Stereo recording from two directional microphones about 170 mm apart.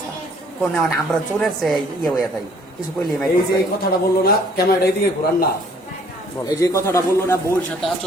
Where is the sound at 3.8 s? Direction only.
65° left (ahead or behind).